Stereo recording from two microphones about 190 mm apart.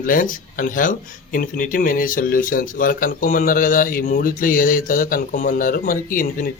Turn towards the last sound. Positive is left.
turn(degrees=45)  # may be behind; listen again after turning